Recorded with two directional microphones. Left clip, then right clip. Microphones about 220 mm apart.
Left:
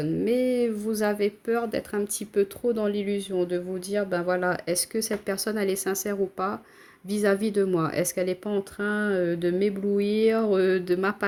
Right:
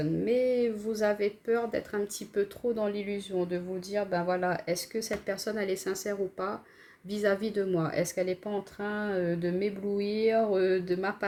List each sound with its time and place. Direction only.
0.0 s speech: 40° left (ahead or behind)